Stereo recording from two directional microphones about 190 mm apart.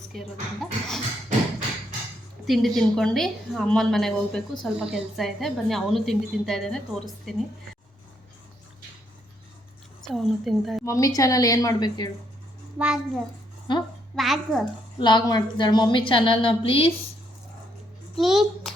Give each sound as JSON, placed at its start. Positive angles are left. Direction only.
{"t": 0.1, "sound": "a woman's voice", "side_deg": 0}
{"t": 2.5, "sound": "a woman's voice", "side_deg": 0}
{"t": 10.0, "sound": "a woman's voice", "side_deg": 0}
{"t": 10.8, "sound": "a woman's voice", "side_deg": 15}
{"t": 12.8, "sound": "a woman's voice", "side_deg": -5}
{"t": 13.7, "sound": "a woman's voice", "side_deg": 25}
{"t": 14.2, "sound": "a woman's voice", "side_deg": 0}
{"t": 14.9, "sound": "a woman's voice", "side_deg": 25}
{"t": 18.2, "sound": "a woman's voice", "side_deg": 0}